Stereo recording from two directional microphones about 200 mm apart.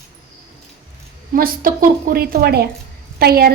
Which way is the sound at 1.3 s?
45° right (ahead or behind).